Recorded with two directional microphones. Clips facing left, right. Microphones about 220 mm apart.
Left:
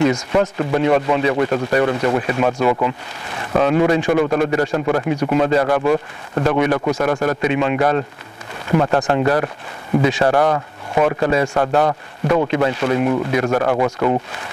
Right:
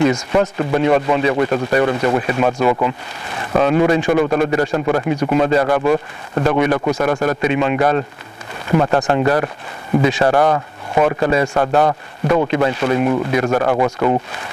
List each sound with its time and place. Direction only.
0.3 s a man's voice: 25° right (ahead or behind)